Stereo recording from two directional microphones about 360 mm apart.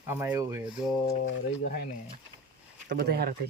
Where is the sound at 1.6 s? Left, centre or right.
Left.